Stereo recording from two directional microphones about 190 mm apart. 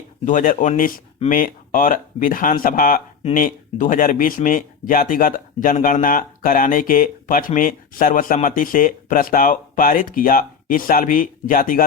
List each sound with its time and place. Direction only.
0.3 s speech: 40° left (ahead or behind)